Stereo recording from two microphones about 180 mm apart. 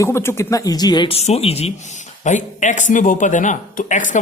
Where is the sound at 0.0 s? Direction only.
15° left (ahead or behind).